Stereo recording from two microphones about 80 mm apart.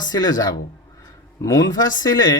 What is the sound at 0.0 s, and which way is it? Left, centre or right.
Speech, left.